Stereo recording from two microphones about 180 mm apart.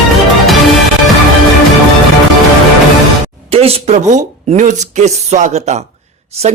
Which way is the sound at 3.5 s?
35° right (ahead or behind).